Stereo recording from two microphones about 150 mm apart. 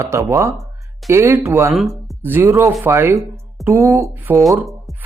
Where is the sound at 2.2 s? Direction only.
15° right (ahead or behind).